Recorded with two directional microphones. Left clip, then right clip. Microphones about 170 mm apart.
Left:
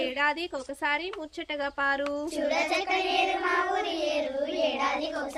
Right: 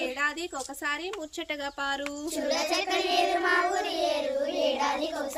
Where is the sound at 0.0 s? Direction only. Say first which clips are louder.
Left 2 dB; 20° left (ahead or behind).